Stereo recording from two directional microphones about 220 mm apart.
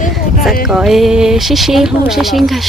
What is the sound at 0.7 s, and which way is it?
Speech, centre (ahead or behind).